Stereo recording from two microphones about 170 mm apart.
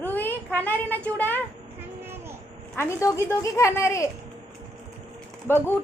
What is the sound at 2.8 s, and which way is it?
A woman's voice, 15° left (ahead or behind).